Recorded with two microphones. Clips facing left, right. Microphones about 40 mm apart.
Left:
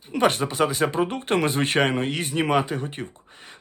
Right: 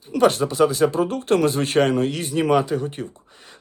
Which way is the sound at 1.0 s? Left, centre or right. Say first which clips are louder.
Right 3 dB; left.